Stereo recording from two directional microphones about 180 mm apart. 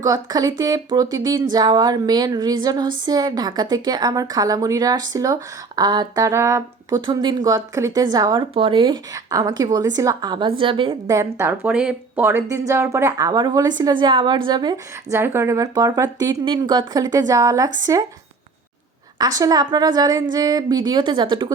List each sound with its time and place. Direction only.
0.0 s speech: 20° right (ahead or behind)
11.1 s speech: 15° right (ahead or behind)
19.4 s speech: 20° right (ahead or behind)